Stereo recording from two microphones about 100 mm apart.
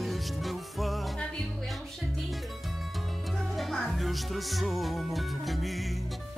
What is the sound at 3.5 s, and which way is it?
Music, centre (ahead or behind).